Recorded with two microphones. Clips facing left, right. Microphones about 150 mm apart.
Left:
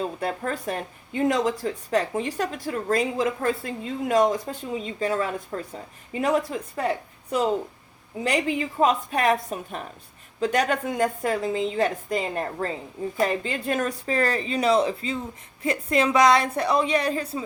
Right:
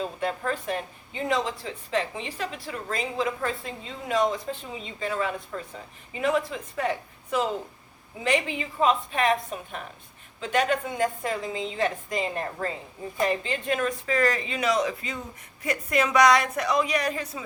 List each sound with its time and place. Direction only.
0.0 s a woman's voice: 40° left (ahead or behind)